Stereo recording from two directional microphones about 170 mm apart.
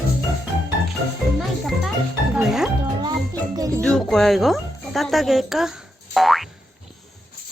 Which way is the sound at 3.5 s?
20° right (ahead or behind).